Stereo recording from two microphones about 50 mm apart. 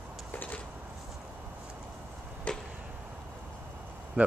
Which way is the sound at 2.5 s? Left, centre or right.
Left.